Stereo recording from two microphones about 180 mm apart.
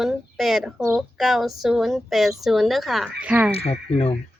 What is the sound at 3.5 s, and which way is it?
Speech, 35° left (ahead or behind).